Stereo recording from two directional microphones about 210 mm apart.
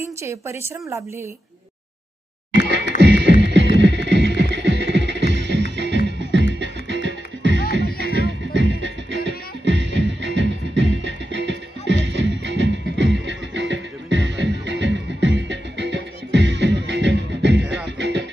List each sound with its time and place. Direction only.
0.2 s a woman's voice: 15° right (ahead or behind)
3.0 s music: 55° right (ahead or behind)
7.6 s music: 45° left (ahead or behind)
8.5 s music: 60° right (ahead or behind)